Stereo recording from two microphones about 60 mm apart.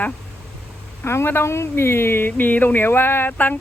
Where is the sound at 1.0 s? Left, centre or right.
Left.